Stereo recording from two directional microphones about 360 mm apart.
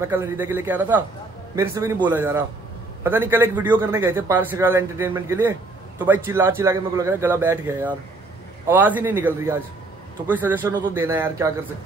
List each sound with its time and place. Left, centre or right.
0.0 s a man's voice: centre